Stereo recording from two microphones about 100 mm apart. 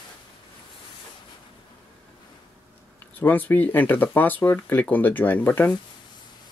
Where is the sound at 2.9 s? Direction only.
15° left (ahead or behind).